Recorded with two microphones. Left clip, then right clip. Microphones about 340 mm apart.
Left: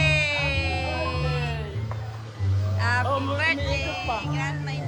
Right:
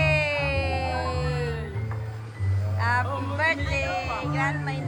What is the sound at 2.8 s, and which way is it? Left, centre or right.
Music, centre.